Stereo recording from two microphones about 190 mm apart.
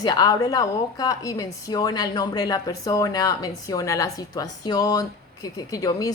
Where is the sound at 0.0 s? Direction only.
20° left (ahead or behind).